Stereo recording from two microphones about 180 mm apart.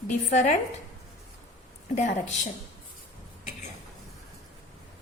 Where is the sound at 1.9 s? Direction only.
40° left (ahead or behind).